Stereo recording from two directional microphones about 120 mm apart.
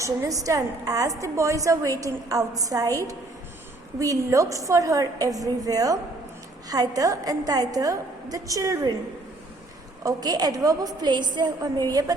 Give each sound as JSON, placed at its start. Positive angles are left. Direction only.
{"t": 0.0, "sound": "a woman's voice", "side_deg": -30}
{"t": 10.0, "sound": "a woman's voice", "side_deg": -30}